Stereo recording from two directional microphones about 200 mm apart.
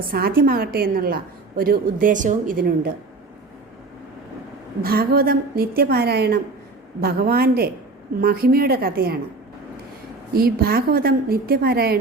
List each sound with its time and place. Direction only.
0.1 s a woman's voice: 50° right (ahead or behind)
4.8 s a woman's voice: 50° right (ahead or behind)
10.3 s a woman's voice: 50° right (ahead or behind)